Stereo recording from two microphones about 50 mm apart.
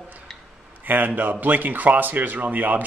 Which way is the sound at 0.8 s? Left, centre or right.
Right.